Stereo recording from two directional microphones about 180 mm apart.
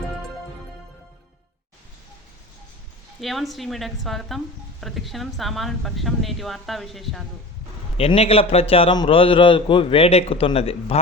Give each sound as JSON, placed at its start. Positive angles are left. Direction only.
{"t": 3.2, "sound": "speech", "side_deg": 0}
{"t": 7.9, "sound": "a man's voice", "side_deg": 35}